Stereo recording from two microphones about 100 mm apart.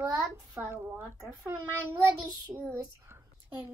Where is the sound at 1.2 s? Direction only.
30° right (ahead or behind).